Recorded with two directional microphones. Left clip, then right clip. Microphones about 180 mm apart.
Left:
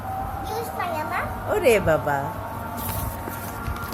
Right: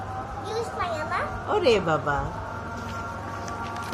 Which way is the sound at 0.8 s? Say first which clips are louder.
Left 2 dB; 20° right (ahead or behind).